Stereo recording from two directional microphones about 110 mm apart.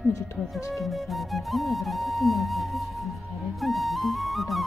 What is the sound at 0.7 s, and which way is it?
Music, centre (ahead or behind).